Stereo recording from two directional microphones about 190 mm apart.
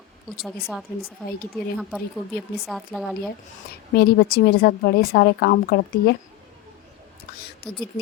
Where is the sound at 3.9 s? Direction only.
55° left (ahead or behind).